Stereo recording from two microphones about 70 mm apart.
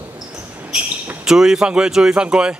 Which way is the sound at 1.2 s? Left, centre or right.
Centre.